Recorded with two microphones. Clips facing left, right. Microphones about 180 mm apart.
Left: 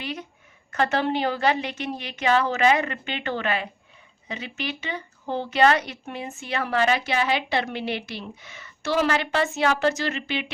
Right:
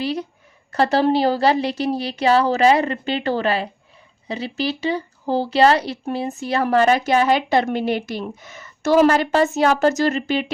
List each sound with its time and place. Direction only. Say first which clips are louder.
0.0 s speech: right 9 dB; 35° right (ahead or behind)